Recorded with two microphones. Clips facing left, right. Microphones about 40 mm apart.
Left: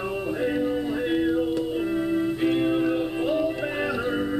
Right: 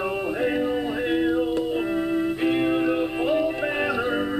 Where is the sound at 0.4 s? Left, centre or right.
Centre.